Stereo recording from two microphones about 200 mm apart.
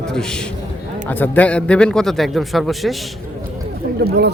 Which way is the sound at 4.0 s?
55° right (ahead or behind).